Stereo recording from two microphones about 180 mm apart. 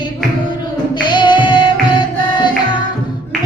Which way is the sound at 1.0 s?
25° left (ahead or behind).